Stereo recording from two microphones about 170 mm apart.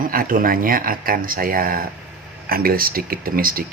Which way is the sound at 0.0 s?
55° right (ahead or behind).